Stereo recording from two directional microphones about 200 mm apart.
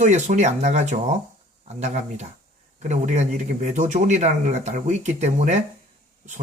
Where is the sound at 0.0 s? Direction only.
35° right (ahead or behind).